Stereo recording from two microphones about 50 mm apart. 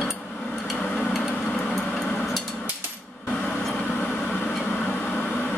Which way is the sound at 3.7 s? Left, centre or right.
Centre.